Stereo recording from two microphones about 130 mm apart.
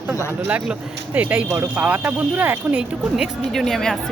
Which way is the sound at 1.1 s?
10° right (ahead or behind).